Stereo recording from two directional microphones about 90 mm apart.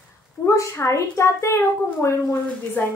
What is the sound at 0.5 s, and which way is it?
A woman's voice, 35° left (ahead or behind).